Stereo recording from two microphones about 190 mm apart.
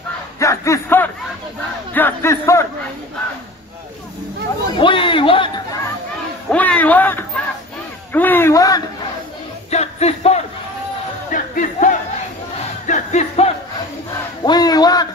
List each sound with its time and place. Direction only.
0.4 s a man's voice: 15° left (ahead or behind)
4.7 s a man's voice: 25° left (ahead or behind)
6.5 s a sound: 5° left (ahead or behind)
8.1 s a man's voice: 10° left (ahead or behind)
9.7 s a sound: 35° left (ahead or behind)
11.3 s crowd: 45° left (ahead or behind)
12.8 s music: 40° left (ahead or behind)
14.4 s a man's voice: 20° left (ahead or behind)